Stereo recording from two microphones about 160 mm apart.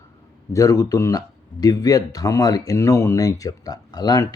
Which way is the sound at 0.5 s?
20° left (ahead or behind).